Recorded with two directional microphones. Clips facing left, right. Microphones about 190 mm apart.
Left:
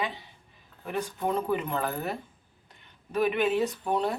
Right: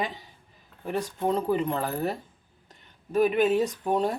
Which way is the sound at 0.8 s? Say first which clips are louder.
Right 3 dB; 30° right (ahead or behind).